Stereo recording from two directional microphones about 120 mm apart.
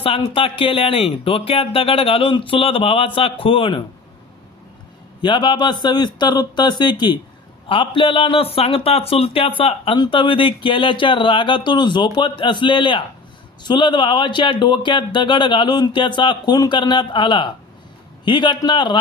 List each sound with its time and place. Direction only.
0.0 s speech: 50° left (ahead or behind)
5.2 s speech: 40° left (ahead or behind)